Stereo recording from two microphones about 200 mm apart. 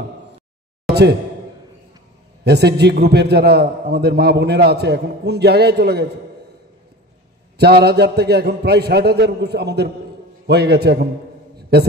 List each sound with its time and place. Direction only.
2.4 s a man's voice: 55° right (ahead or behind)
7.5 s a man's voice: 55° right (ahead or behind)